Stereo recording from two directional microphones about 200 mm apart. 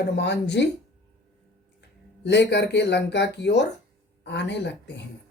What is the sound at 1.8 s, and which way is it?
Speech, 60° left (ahead or behind).